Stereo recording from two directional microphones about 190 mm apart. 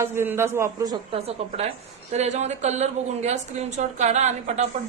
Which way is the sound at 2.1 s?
35° right (ahead or behind).